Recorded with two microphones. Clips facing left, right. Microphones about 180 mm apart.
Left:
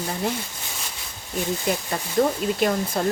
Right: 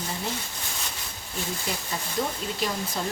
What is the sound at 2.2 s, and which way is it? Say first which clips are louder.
Speech: left 9 dB; 55° left (ahead or behind).